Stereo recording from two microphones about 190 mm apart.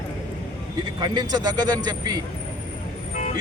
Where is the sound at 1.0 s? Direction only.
20° right (ahead or behind).